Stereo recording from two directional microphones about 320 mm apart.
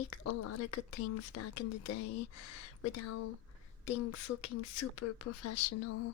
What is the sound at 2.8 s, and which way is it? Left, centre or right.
Speech, left.